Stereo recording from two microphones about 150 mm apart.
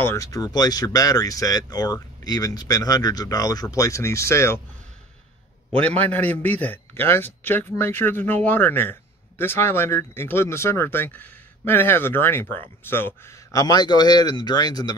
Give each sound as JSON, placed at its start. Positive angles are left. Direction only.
{"t": 0.0, "sound": "speech", "side_deg": 20}
{"t": 5.7, "sound": "speech", "side_deg": 10}